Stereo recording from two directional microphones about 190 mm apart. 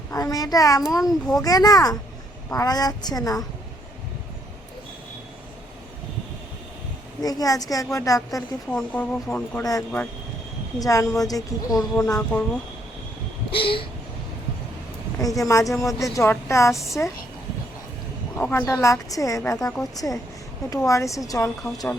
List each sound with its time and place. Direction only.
0.1 s a woman's voice: 20° left (ahead or behind)
7.2 s a woman's voice: 20° left (ahead or behind)
8.7 s a woman's voice: 5° left (ahead or behind)
13.5 s a woman's voice: 30° left (ahead or behind)
15.2 s speech: 20° left (ahead or behind)
18.3 s speech: 10° left (ahead or behind)